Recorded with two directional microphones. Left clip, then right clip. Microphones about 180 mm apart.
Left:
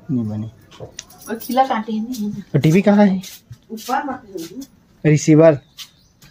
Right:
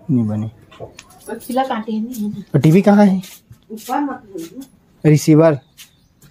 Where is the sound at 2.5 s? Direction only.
20° right (ahead or behind).